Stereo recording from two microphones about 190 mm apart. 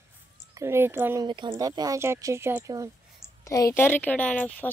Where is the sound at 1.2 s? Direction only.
25° right (ahead or behind).